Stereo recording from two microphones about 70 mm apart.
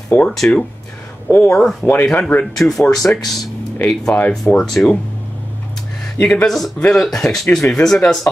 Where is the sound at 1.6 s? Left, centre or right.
Centre.